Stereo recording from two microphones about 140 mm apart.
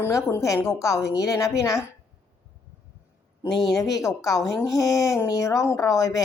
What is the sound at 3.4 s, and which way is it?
A man's voice, 20° left (ahead or behind).